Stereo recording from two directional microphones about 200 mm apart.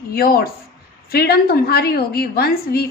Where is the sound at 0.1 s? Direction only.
50° left (ahead or behind).